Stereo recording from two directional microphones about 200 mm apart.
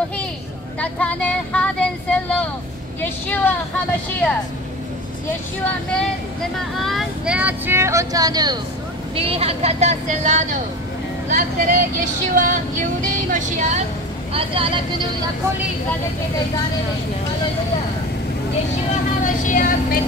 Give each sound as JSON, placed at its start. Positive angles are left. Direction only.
{"t": 0.7, "sound": "speech", "side_deg": 5}
{"t": 6.8, "sound": "speech", "side_deg": 0}
{"t": 9.1, "sound": "vehicle", "side_deg": -30}
{"t": 11.2, "sound": "speech", "side_deg": -45}
{"t": 12.0, "sound": "vehicle", "side_deg": -40}
{"t": 14.3, "sound": "a woman's voice", "side_deg": -25}
{"t": 19.2, "sound": "vehicle", "side_deg": 40}